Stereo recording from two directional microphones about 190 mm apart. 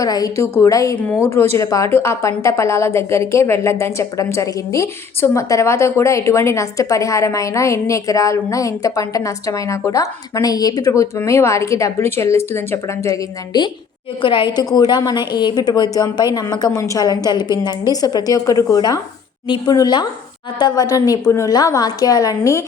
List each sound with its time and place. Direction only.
0.0 s a woman's voice: 20° left (ahead or behind)